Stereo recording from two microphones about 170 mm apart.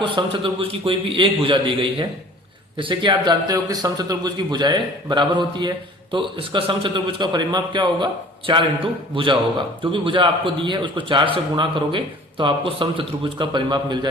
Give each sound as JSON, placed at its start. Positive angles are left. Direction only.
{"t": 0.0, "sound": "a man's voice", "side_deg": -30}